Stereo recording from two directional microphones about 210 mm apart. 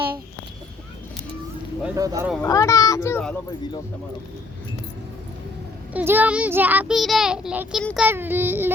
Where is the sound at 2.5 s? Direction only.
15° left (ahead or behind).